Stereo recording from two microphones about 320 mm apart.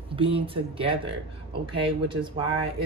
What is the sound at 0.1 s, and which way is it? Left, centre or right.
Speech, centre.